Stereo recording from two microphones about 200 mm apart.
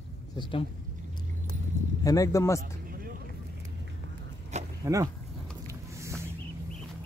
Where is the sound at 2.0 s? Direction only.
15° left (ahead or behind).